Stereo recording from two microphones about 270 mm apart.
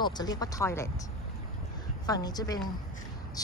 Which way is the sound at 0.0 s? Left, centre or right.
Centre.